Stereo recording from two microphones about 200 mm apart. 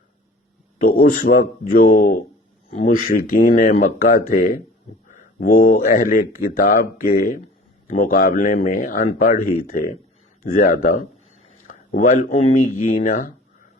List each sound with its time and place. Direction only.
0.8 s speech: 45° left (ahead or behind)